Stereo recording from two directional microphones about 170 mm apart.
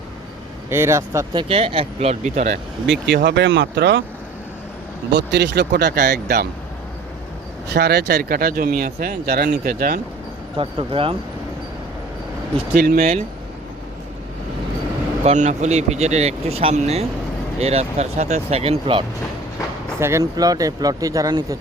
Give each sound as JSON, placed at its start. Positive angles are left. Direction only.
{"t": 0.7, "sound": "speech", "side_deg": -15}
{"t": 2.8, "sound": "speech", "side_deg": -90}
{"t": 5.1, "sound": "speech", "side_deg": -85}
{"t": 7.7, "sound": "speech", "side_deg": -75}
{"t": 10.6, "sound": "speech", "side_deg": -30}
{"t": 12.7, "sound": "speech", "side_deg": -60}
{"t": 15.2, "sound": "speech", "side_deg": -45}
{"t": 20.0, "sound": "speech", "side_deg": -15}